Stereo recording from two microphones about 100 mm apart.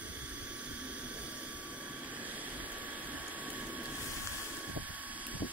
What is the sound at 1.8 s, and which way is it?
Vehicle, 15° right (ahead or behind).